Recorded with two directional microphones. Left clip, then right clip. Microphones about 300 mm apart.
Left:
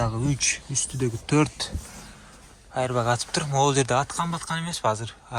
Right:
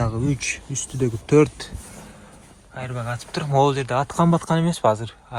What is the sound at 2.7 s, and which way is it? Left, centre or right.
Speech, centre.